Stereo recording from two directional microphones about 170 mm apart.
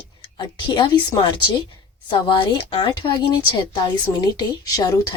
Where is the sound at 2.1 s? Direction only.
25° left (ahead or behind).